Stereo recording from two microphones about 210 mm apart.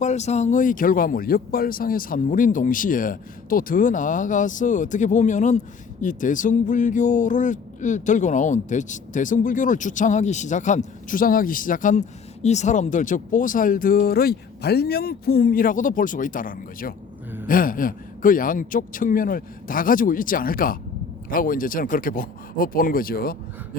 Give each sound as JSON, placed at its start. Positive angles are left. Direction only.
{"t": 0.0, "sound": "speech", "side_deg": 35}